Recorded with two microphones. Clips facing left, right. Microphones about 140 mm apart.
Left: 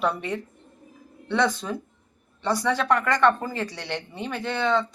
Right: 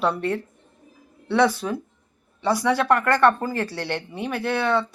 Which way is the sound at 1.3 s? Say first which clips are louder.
Right 4 dB; 5° right (ahead or behind).